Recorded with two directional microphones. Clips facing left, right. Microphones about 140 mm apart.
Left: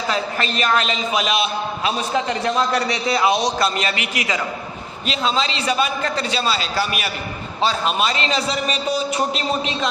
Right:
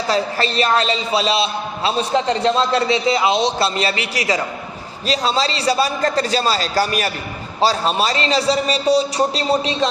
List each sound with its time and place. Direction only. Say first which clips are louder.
0.1 s a man's voice: right 5 dB; 35° right (ahead or behind)